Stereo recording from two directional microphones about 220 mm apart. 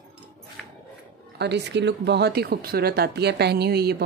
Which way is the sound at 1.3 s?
50° right (ahead or behind).